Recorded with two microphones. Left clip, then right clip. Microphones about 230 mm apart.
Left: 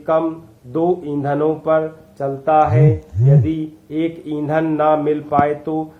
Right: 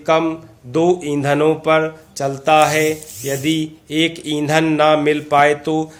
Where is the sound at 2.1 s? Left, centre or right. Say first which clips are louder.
Right 1 dB; right.